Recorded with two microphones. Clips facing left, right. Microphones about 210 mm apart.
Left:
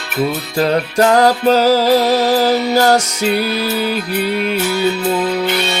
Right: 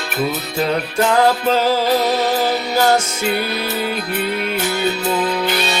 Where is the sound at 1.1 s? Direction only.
40° left (ahead or behind).